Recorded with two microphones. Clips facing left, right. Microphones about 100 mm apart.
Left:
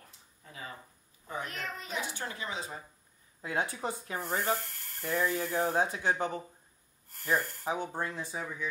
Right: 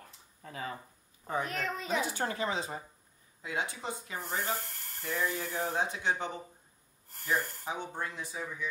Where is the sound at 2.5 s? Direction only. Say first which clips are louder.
Right 3 dB; 30° right (ahead or behind).